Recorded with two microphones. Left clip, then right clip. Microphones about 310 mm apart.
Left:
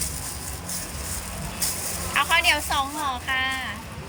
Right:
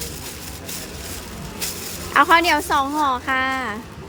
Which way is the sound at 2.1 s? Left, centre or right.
Centre.